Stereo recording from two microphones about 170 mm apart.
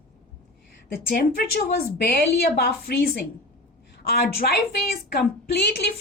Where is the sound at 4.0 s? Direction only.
65° left (ahead or behind).